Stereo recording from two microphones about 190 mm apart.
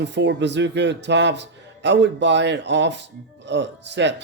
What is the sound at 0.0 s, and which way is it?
Speech, 65° right (ahead or behind).